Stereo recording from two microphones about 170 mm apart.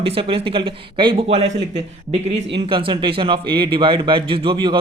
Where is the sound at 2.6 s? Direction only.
30° right (ahead or behind).